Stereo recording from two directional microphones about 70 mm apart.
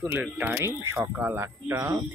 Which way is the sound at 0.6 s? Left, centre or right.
Right.